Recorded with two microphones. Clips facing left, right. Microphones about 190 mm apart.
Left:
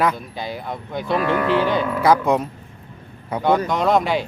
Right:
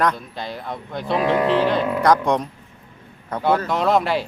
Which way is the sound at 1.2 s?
30° right (ahead or behind).